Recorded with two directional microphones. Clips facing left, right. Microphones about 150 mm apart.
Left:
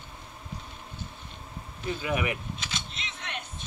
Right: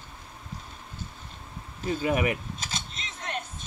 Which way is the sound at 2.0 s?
35° right (ahead or behind).